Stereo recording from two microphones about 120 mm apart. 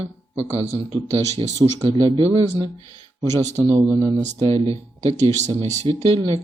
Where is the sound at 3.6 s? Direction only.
30° right (ahead or behind).